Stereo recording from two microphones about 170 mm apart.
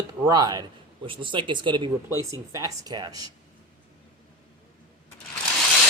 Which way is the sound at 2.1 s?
20° right (ahead or behind).